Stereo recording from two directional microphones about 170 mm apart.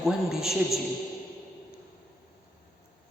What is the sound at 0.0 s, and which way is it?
Speech, centre (ahead or behind).